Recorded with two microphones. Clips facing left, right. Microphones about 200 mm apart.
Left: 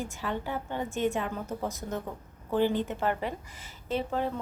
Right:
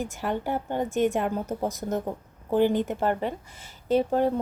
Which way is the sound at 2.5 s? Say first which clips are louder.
Right 4 dB; 55° right (ahead or behind).